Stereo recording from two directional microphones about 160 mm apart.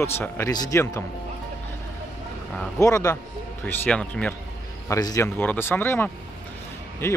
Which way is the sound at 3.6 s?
10° left (ahead or behind).